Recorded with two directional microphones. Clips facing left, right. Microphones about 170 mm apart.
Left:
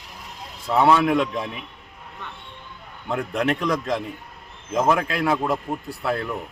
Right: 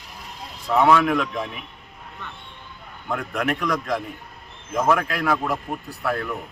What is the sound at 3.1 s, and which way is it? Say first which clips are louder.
A man's voice: left 2 dB; 30° left (ahead or behind).